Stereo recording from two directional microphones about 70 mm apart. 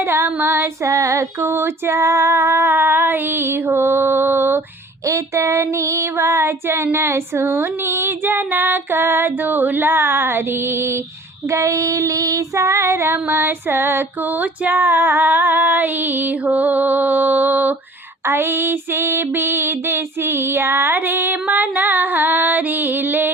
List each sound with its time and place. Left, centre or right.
0.0 s female singing: right
5.0 s female singing: right
11.4 s female singing: right
13.1 s music: right